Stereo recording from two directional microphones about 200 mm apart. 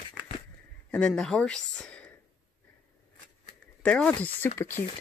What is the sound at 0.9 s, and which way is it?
Speech, 5° left (ahead or behind).